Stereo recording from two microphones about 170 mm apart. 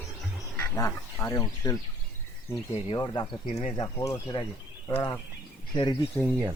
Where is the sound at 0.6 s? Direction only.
15° left (ahead or behind).